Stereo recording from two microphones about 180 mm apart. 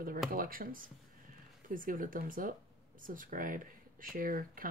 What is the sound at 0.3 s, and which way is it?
Speech, 50° right (ahead or behind).